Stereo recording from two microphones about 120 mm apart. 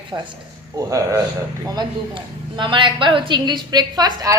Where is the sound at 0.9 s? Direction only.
25° right (ahead or behind).